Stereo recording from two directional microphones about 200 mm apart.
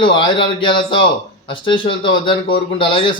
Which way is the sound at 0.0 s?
25° left (ahead or behind).